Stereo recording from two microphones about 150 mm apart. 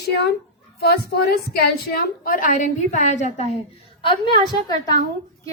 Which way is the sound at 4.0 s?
35° left (ahead or behind).